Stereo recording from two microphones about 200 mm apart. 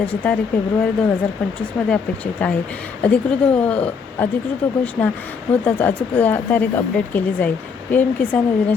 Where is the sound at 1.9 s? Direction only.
5° left (ahead or behind).